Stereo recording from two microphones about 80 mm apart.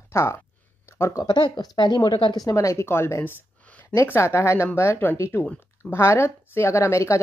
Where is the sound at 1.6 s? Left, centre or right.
Left.